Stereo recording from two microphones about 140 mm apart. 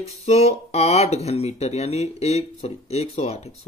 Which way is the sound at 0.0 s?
50° left (ahead or behind).